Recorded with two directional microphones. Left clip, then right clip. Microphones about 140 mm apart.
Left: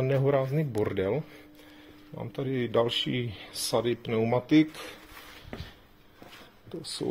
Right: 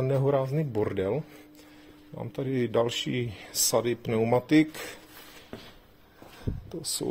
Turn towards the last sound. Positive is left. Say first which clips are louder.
# right 2 dB
turn(degrees=-60)  # may be behind; listen again after turning